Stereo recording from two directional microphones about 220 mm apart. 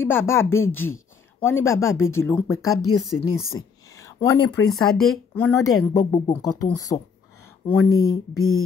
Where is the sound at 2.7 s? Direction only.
90° left.